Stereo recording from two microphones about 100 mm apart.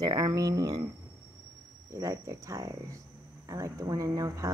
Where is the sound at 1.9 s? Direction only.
35° right (ahead or behind).